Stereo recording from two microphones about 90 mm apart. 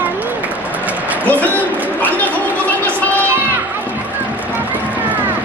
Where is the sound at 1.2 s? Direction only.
20° left (ahead or behind).